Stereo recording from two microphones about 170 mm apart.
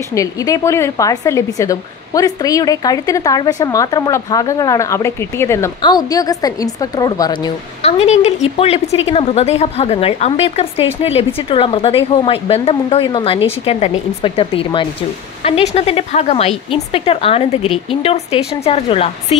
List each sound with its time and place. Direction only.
0.1 s speech: 20° left (ahead or behind)
7.8 s speech: 40° left (ahead or behind)